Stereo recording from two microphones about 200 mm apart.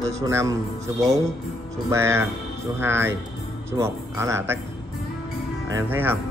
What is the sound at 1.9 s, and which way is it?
Speech, 15° right (ahead or behind).